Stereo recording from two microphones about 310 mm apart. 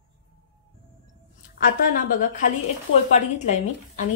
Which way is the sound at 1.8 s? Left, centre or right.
Left.